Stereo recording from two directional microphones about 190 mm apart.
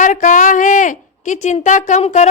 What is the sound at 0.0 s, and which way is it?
A woman's voice, 40° left (ahead or behind).